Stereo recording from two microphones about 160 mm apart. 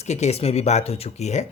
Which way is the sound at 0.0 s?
45° left (ahead or behind).